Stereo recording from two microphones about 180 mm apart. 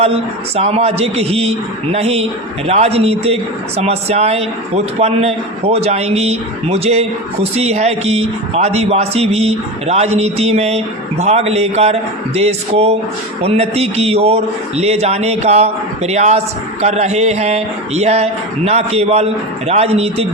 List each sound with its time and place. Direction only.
0.0 s speech: 35° right (ahead or behind)